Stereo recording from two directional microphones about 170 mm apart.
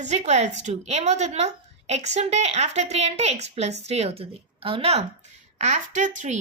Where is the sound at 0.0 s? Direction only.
40° right (ahead or behind).